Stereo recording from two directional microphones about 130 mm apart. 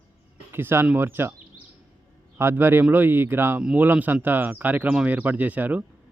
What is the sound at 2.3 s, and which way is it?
Speech, 15° right (ahead or behind).